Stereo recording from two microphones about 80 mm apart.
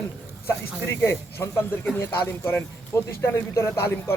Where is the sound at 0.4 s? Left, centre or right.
Left.